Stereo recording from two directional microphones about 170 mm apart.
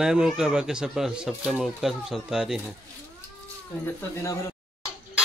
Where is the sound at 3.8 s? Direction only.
15° left (ahead or behind).